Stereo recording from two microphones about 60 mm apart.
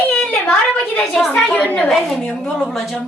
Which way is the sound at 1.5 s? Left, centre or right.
Left.